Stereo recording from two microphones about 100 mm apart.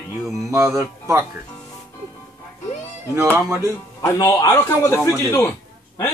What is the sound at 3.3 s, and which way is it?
Mantra, 25° right (ahead or behind).